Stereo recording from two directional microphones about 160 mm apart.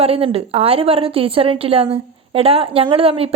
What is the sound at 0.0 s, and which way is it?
A woman's voice, 35° right (ahead or behind).